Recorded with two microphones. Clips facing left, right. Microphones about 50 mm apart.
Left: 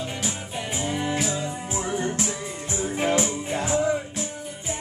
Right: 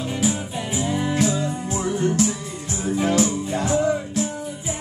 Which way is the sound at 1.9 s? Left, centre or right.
Centre.